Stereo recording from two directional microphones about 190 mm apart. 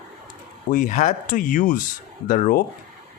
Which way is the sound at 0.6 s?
45° left (ahead or behind).